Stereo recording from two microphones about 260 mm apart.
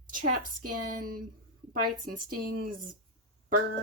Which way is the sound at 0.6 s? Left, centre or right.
Right.